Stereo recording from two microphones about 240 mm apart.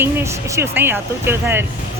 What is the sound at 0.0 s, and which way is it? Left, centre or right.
Speech, centre.